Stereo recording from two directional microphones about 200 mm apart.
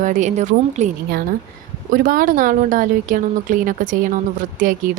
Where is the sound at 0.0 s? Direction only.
40° right (ahead or behind).